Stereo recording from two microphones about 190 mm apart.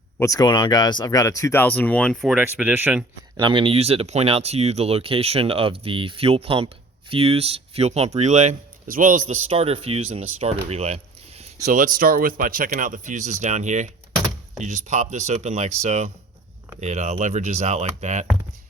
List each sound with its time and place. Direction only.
0.2 s speech: 20° left (ahead or behind)
2.3 s speech: 10° right (ahead or behind)
3.3 s speech: 25° right (ahead or behind)
11.6 s speech: 45° right (ahead or behind)